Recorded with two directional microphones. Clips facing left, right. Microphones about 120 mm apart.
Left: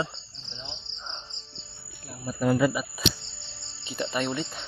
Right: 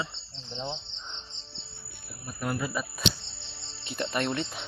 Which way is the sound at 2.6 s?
65° left (ahead or behind).